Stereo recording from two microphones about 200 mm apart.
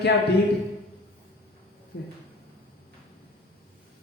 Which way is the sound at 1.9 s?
60° left (ahead or behind).